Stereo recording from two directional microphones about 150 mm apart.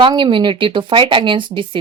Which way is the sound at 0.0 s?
35° right (ahead or behind).